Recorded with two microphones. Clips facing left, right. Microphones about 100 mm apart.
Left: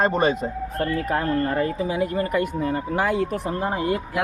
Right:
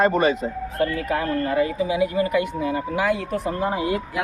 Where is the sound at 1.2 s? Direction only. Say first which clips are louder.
Right 1 dB; 90° right.